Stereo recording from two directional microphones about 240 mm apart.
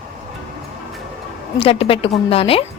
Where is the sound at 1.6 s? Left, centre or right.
Left.